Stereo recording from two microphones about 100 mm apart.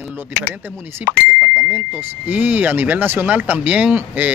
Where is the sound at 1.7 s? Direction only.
15° right (ahead or behind).